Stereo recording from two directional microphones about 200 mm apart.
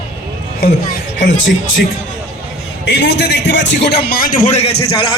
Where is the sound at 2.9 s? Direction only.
55° left (ahead or behind).